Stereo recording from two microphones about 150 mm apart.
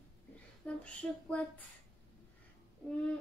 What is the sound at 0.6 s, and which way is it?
Speech, 10° left (ahead or behind).